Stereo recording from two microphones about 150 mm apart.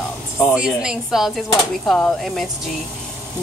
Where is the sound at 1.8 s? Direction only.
10° left (ahead or behind).